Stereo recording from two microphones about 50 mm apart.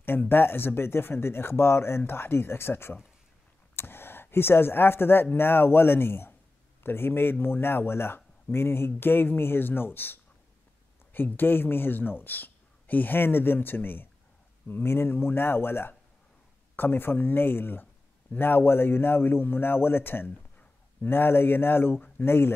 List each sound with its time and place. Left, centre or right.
0.3 s speech: left